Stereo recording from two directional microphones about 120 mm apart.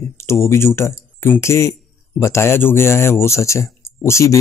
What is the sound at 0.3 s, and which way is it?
Speech, 20° left (ahead or behind).